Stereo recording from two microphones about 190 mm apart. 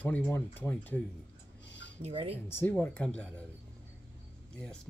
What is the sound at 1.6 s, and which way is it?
Dishes, 65° left (ahead or behind).